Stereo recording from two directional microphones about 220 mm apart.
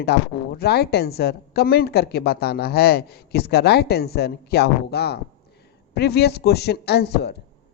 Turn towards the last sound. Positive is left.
turn(degrees=50)  # may be behind; listen again after turning